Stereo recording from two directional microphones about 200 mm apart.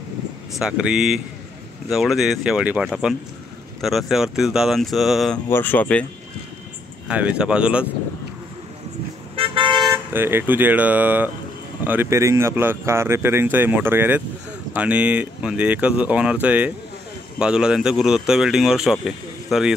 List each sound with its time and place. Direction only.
0.6 s speech: 5° right (ahead or behind)
5.5 s speech: 10° left (ahead or behind)
7.1 s speech: 5° right (ahead or behind)
9.3 s vehicle: 25° right (ahead or behind)
10.1 s speech: 10° right (ahead or behind)